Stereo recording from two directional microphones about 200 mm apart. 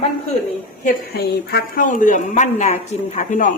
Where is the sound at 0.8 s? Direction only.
55° left (ahead or behind).